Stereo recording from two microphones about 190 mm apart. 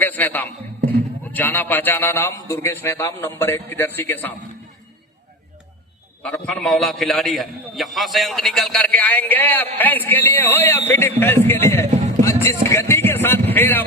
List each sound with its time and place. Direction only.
0.0 s a man's voice: 10° left (ahead or behind)
6.2 s a man's voice: 5° left (ahead or behind)
12.2 s music: 15° left (ahead or behind)